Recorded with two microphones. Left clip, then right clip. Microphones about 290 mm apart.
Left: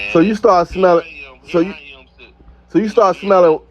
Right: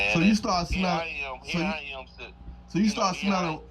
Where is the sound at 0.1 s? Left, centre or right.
Left.